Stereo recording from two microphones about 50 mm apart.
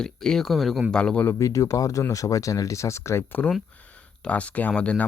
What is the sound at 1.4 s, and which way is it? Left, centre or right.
Speech, left.